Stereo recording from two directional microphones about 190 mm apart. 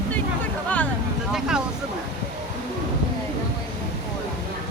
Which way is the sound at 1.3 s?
5° right (ahead or behind).